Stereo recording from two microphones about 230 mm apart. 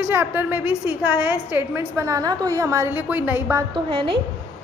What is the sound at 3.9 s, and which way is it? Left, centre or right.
Speech, right.